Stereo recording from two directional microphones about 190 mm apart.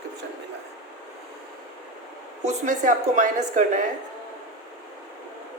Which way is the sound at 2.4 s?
40° right (ahead or behind).